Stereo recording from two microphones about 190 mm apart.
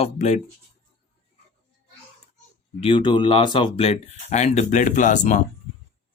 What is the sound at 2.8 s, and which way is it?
Speech, 25° left (ahead or behind).